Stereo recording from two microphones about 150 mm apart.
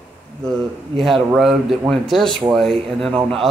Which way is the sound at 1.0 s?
Centre (ahead or behind).